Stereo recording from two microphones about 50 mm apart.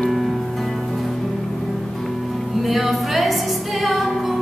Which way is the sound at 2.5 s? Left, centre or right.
Centre.